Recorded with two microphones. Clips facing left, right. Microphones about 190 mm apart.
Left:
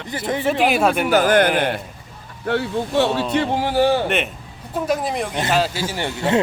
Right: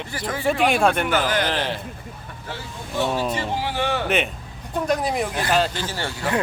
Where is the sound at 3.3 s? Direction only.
50° left (ahead or behind); by 4.0 s 35° left (ahead or behind).